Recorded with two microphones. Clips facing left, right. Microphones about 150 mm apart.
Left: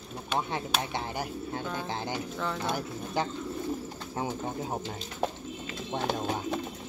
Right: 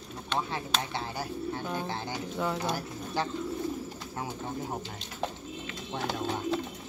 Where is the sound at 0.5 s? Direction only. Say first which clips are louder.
Left 1 dB; 15° left (ahead or behind).